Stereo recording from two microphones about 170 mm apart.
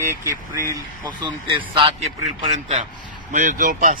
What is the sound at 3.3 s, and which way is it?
Speech, 50° right (ahead or behind).